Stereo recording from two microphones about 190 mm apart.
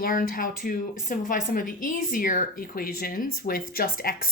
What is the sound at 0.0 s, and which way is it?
A woman's voice, 50° left (ahead or behind).